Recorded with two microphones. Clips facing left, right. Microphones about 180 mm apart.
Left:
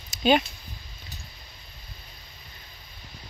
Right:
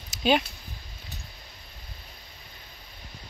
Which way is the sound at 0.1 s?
5° right (ahead or behind).